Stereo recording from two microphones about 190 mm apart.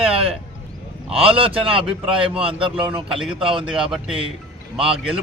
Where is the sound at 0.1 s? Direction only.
30° right (ahead or behind).